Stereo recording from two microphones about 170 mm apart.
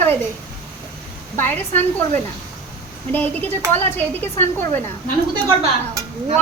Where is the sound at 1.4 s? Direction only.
10° left (ahead or behind).